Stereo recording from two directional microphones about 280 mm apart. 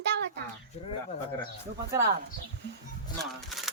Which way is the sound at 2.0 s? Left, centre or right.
Right.